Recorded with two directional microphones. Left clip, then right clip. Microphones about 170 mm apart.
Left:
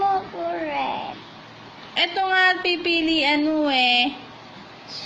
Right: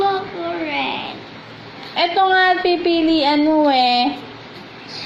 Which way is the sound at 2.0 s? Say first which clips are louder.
Right 5 dB; 45° left (ahead or behind).